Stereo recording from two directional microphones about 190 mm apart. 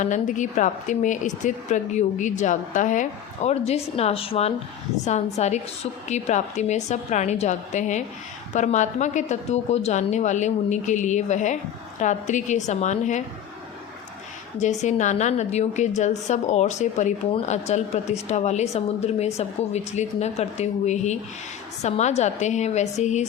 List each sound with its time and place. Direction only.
0.0 s a woman's voice: 40° left (ahead or behind)
14.6 s a woman's voice: 40° left (ahead or behind)